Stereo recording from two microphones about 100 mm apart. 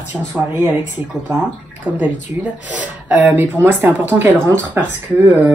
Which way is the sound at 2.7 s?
15° right (ahead or behind).